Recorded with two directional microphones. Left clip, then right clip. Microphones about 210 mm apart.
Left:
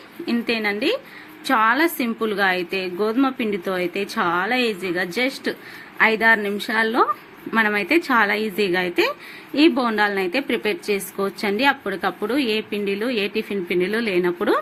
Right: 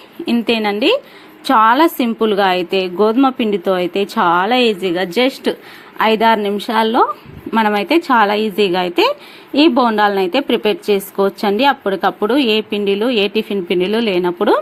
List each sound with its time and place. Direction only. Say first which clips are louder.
0.3 s a woman's voice: right 6 dB; 25° right (ahead or behind)